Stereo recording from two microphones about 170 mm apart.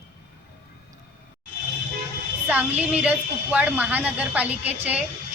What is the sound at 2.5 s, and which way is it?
A woman's voice, 10° right (ahead or behind).